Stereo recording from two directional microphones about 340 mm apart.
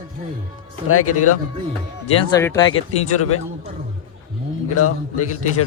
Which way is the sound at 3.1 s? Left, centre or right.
Left.